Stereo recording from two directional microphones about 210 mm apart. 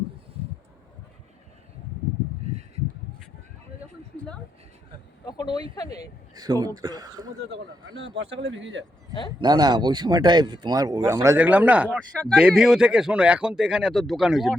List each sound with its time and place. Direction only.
5.2 s a sound: 20° left (ahead or behind)
5.7 s speech: 15° left (ahead or behind)
6.3 s speech: 20° right (ahead or behind)
8.0 s speech: 65° right (ahead or behind)
9.4 s speech: 20° right (ahead or behind); by 14.5 s centre (ahead or behind)